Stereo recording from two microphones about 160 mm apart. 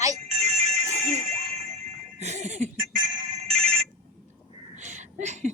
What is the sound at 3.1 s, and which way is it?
Ringtone, 50° right (ahead or behind).